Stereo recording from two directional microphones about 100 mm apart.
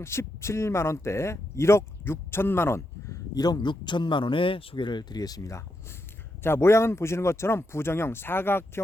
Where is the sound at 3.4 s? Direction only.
45° left (ahead or behind).